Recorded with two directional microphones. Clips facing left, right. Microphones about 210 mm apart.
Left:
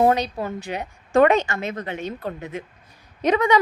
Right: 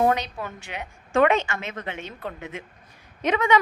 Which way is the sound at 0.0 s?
35° left (ahead or behind).